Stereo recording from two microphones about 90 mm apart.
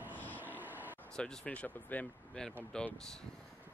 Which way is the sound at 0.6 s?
20° right (ahead or behind).